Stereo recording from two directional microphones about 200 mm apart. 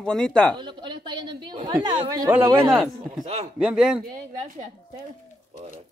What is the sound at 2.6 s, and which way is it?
Speech, 5° right (ahead or behind).